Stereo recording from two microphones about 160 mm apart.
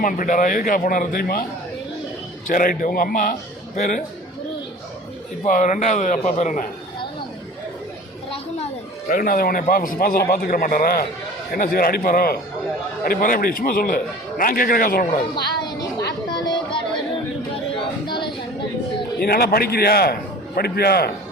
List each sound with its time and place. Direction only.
0.0 s a man's voice: 55° left (ahead or behind)
2.5 s a man's voice: 60° left (ahead or behind)
5.5 s a man's voice: 50° left (ahead or behind)
9.0 s a man's voice: 65° left (ahead or behind)
15.4 s a sound: 25° left (ahead or behind)
18.0 s a sound: 30° left (ahead or behind)
19.2 s a man's voice: 75° left (ahead or behind)